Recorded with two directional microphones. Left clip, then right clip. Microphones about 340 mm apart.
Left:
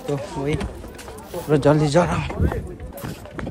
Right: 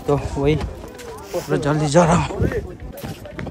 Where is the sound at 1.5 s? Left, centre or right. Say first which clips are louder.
Left 4 dB; centre.